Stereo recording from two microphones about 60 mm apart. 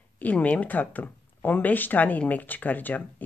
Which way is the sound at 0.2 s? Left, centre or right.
Left.